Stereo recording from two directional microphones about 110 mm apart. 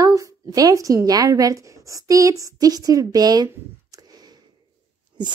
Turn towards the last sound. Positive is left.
turn(degrees=-35)  # may be behind; listen again after turning